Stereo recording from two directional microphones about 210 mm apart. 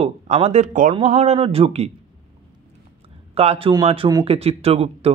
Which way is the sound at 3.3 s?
25° right (ahead or behind).